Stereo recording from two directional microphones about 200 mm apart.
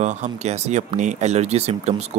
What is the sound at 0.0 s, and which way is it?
Speech, 35° right (ahead or behind).